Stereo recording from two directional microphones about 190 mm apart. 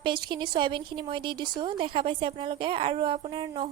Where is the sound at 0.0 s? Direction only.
25° right (ahead or behind).